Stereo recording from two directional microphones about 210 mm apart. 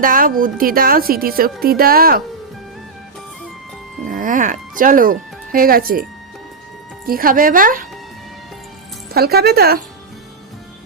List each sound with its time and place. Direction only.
0.0 s a woman's voice: 40° right (ahead or behind)
4.1 s speech: 40° right (ahead or behind)
7.1 s speech: 45° right (ahead or behind)
9.1 s a woman's voice: 50° right (ahead or behind)